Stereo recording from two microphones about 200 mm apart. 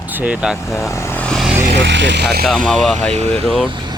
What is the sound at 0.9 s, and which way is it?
Vehicle, 10° left (ahead or behind).